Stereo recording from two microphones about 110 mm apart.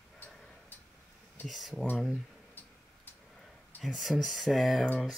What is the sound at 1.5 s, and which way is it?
Speech, centre (ahead or behind).